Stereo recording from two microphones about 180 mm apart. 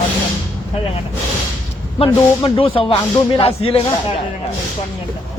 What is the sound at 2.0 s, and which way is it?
Speech, 30° left (ahead or behind).